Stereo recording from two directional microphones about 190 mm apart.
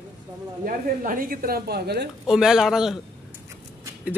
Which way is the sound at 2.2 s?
5° right (ahead or behind).